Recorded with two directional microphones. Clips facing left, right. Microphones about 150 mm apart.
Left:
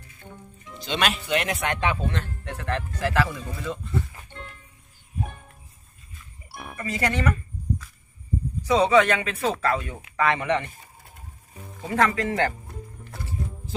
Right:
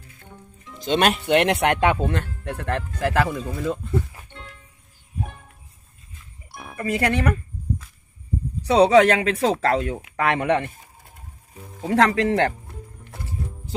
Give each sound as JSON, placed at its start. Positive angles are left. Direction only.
{"t": 0.8, "sound": "speech", "side_deg": -50}
{"t": 6.5, "sound": "music", "side_deg": 5}
{"t": 6.8, "sound": "speech", "side_deg": -60}
{"t": 8.6, "sound": "speech", "side_deg": -70}
{"t": 10.2, "sound": "speech", "side_deg": -60}
{"t": 11.9, "sound": "speech", "side_deg": -75}